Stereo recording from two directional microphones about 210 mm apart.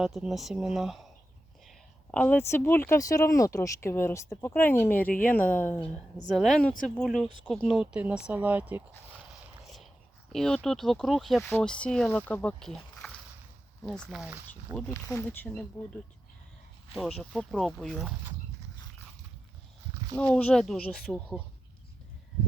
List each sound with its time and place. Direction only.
0.0 s speech: centre (ahead or behind)
10.3 s speech: centre (ahead or behind)
13.8 s speech: centre (ahead or behind)
14.8 s speech: 10° left (ahead or behind)
16.9 s speech: centre (ahead or behind)
20.1 s speech: 5° left (ahead or behind)